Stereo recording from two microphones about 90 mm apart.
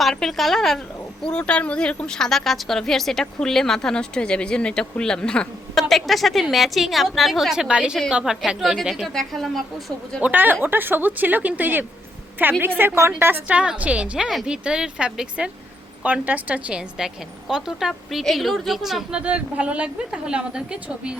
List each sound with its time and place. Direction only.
0.0 s a woman's voice: 5° left (ahead or behind)
10.2 s a woman's voice: 20° right (ahead or behind); by 19.2 s 5° right (ahead or behind)
19.2 s a woman's voice: 15° right (ahead or behind)